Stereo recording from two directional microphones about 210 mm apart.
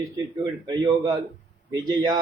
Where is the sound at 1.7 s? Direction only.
20° right (ahead or behind).